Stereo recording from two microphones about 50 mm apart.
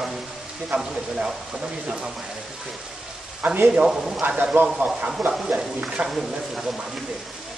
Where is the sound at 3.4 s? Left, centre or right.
Right.